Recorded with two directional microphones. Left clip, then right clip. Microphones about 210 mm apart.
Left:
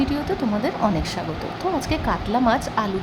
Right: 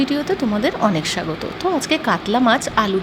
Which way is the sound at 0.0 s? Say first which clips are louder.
Right 4 dB; 10° right (ahead or behind).